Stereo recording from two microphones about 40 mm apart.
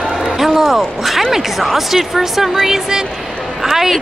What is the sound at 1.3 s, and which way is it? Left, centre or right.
Speech, centre.